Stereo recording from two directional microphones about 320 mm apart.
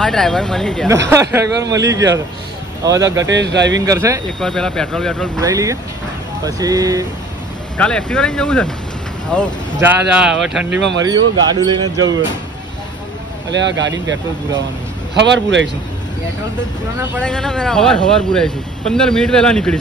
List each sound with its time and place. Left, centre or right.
0.0 s speech: centre
1.0 s a man's voice: centre
3.3 s speech: right
3.8 s a man's voice: centre
4.4 s speech: centre
5.4 s a man's voice: centre
7.7 s a man's voice: centre
13.5 s speech: right
15.1 s speech: right
17.0 s speech: centre